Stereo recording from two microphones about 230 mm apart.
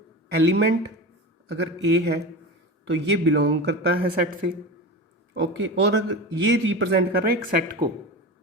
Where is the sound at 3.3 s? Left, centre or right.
Right.